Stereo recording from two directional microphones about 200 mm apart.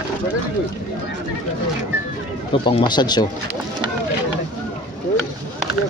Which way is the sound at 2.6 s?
20° left (ahead or behind).